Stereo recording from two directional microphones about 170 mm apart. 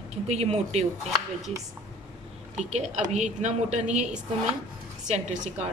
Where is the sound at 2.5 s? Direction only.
40° right (ahead or behind).